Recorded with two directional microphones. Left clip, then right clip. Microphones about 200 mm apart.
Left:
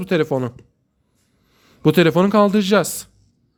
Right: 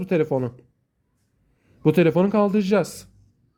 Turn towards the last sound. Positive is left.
turn(degrees=10)  # may be behind; listen again after turning